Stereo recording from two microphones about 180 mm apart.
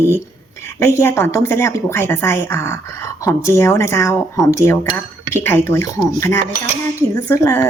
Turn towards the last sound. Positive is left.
turn(degrees=15)  # may be behind; listen again after turning